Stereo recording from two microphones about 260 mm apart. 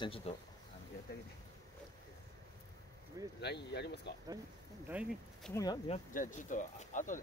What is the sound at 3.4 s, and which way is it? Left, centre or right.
Speech, left.